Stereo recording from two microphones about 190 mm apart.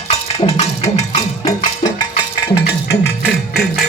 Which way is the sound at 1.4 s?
20° left (ahead or behind).